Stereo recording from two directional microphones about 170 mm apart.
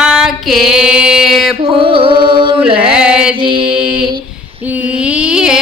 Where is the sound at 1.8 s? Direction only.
30° right (ahead or behind).